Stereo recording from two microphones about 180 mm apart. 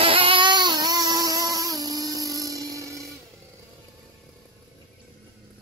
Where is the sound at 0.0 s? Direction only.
30° right (ahead or behind).